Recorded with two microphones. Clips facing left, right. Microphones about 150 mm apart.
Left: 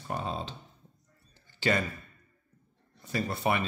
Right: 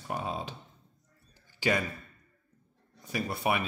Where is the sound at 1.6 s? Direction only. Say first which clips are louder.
Even; 10° right (ahead or behind).